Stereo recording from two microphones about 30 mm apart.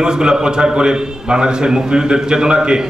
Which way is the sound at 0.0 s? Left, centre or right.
Right.